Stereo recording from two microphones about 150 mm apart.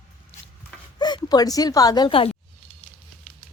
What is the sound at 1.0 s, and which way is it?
Speech, 30° left (ahead or behind).